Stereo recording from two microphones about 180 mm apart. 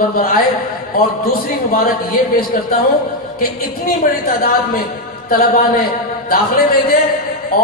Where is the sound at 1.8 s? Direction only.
55° left (ahead or behind).